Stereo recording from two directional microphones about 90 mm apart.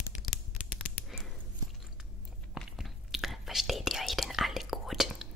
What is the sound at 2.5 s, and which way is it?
Whispering, centre (ahead or behind).